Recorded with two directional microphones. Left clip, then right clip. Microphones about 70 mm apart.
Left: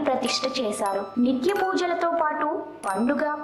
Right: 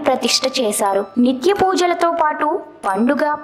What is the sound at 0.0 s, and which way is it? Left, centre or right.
A woman's voice, right.